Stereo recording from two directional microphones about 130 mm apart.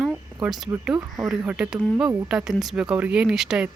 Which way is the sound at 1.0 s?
25° right (ahead or behind).